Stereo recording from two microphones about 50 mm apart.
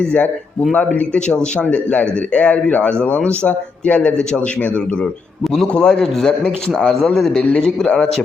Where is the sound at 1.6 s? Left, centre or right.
Left.